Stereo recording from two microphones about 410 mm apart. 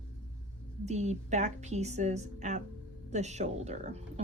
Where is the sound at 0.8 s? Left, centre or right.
Centre.